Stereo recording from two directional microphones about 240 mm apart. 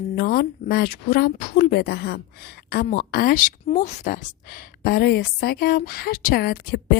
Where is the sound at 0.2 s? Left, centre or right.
Left.